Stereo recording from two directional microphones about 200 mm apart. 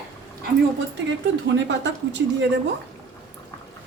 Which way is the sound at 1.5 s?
60° right (ahead or behind).